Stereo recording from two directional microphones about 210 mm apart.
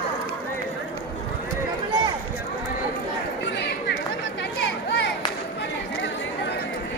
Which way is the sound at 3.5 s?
55° left (ahead or behind).